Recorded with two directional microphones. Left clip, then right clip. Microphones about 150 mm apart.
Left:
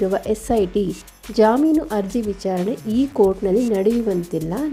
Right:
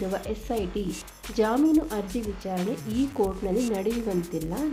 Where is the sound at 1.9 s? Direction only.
45° left (ahead or behind).